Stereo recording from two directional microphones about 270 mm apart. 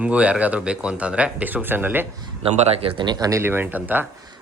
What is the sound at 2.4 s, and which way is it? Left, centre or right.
Speech, right.